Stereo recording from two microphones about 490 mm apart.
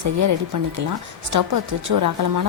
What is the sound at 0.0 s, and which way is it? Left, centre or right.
Speech, right.